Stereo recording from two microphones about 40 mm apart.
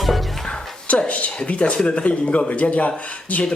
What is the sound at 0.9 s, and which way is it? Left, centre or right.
A man's voice, left.